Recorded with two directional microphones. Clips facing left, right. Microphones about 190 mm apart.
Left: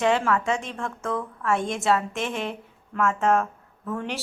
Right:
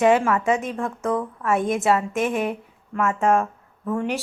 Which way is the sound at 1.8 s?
15° right (ahead or behind).